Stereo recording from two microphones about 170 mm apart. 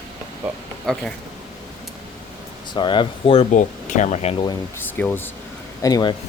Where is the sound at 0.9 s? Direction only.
Centre (ahead or behind).